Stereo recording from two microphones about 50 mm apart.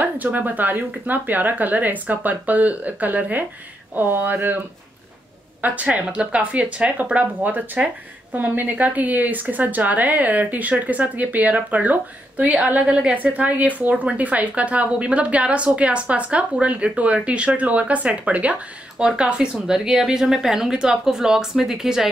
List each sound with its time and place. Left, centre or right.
0.0 s a woman's voice: right
5.6 s a woman's voice: right
13.1 s a woman's voice: right; by 22.0 s centre